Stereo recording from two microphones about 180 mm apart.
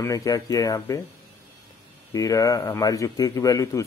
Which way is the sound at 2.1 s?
20° left (ahead or behind).